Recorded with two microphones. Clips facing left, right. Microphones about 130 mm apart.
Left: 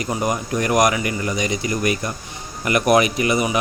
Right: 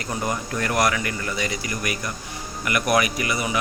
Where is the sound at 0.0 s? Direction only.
15° left (ahead or behind).